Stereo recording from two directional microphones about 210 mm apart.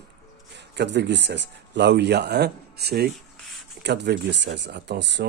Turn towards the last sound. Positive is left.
turn(degrees=-55)  # may be behind; listen again after turning